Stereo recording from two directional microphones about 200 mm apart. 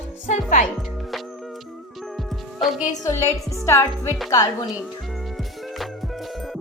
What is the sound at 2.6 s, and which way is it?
Music, centre (ahead or behind).